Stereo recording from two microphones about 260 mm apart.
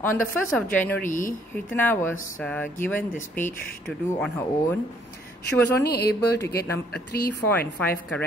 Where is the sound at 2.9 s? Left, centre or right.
Centre.